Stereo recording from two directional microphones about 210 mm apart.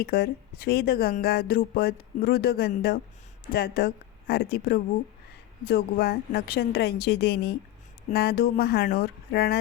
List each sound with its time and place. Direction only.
0.0 s speech: 45° left (ahead or behind)